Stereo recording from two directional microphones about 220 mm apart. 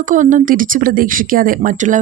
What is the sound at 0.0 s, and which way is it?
A woman's voice, 35° right (ahead or behind).